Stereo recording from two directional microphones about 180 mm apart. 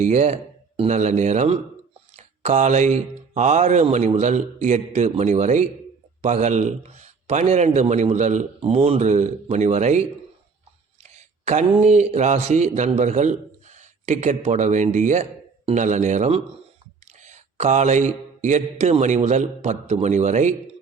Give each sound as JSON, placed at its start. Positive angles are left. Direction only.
{"t": 0.0, "sound": "speech", "side_deg": -40}
{"t": 11.0, "sound": "speech", "side_deg": -40}